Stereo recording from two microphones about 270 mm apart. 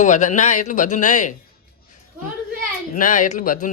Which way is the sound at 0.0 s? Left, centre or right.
Left.